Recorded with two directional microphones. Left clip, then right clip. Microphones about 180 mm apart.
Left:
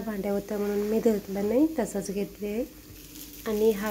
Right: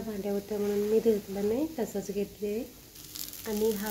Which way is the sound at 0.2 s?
15° left (ahead or behind).